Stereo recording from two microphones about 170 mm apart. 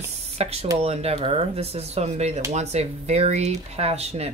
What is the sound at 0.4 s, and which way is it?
Speech, 35° right (ahead or behind).